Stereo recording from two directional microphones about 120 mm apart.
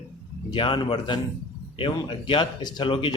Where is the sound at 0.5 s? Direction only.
45° left (ahead or behind).